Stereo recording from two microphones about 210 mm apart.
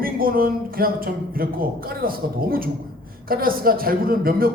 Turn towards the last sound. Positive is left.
turn(degrees=-45)  # may be behind; listen again after turning